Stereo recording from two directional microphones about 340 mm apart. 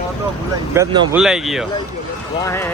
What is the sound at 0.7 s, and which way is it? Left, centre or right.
Speech, centre.